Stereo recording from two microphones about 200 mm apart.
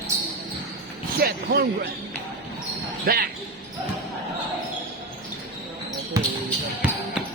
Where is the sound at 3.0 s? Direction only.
45° right (ahead or behind).